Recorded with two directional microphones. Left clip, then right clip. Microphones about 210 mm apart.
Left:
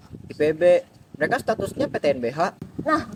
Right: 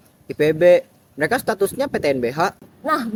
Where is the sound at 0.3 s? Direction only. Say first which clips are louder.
Right 4 dB; 45° right (ahead or behind).